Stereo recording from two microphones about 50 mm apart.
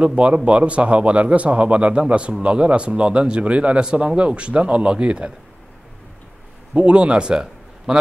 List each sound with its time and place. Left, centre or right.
0.0 s a man's voice: right
6.7 s a man's voice: right